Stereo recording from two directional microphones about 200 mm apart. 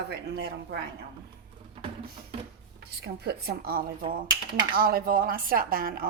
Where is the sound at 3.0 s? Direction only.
55° right (ahead or behind).